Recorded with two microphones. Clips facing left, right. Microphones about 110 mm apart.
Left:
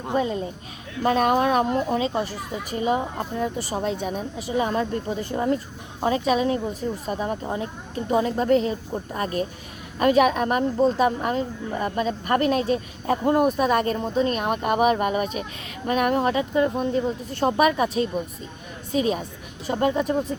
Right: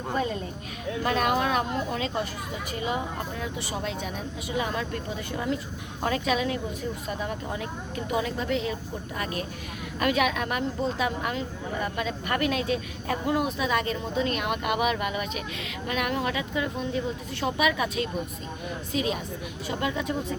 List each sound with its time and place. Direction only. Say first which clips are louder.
0.1 s speech: left 5 dB; 25° left (ahead or behind)
1.0 s speech: left 6 dB; 35° left (ahead or behind)
6.0 s speech: left 5 dB; 25° left (ahead or behind); by 20.1 s 45° left (ahead or behind)